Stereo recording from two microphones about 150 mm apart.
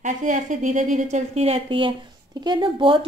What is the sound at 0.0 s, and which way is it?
A woman's voice, 60° right (ahead or behind).